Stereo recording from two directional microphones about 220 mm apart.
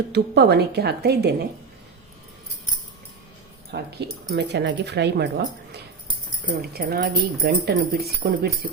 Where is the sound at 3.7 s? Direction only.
50° right (ahead or behind).